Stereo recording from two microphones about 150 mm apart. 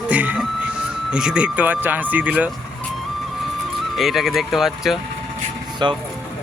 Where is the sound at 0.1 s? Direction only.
10° right (ahead or behind).